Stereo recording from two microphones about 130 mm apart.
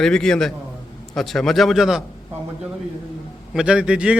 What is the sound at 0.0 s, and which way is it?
A man's voice, 5° left (ahead or behind).